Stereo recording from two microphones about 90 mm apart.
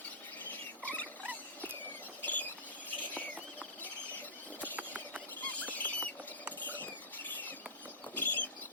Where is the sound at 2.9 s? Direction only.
20° left (ahead or behind).